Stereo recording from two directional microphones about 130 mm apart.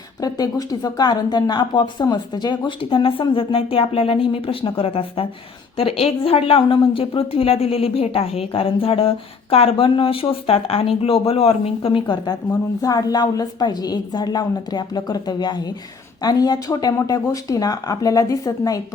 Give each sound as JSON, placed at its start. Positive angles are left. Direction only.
{"t": 0.2, "sound": "a woman's voice", "side_deg": 30}